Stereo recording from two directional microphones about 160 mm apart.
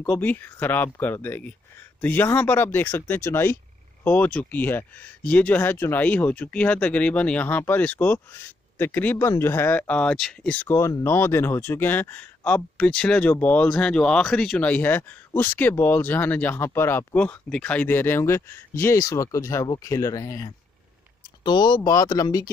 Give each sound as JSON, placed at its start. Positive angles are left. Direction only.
{"t": 0.0, "sound": "speech", "side_deg": 10}